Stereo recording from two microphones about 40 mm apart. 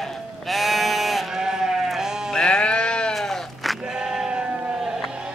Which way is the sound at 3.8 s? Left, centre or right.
Centre.